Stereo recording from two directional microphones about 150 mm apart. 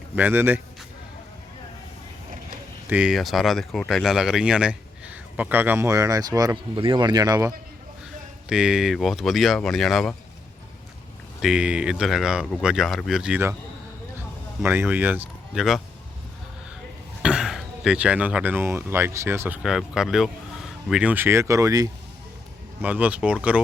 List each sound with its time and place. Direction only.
0.2 s speech: 10° right (ahead or behind)
2.9 s speech: 5° right (ahead or behind); by 7.5 s 25° right (ahead or behind)
8.4 s speech: 5° right (ahead or behind)
11.3 s speech: 5° right (ahead or behind)
14.6 s speech: 15° right (ahead or behind)
17.2 s speech: 5° right (ahead or behind)
19.6 s speech: 5° right (ahead or behind); by 21.8 s 25° right (ahead or behind)
22.8 s speech: 10° right (ahead or behind)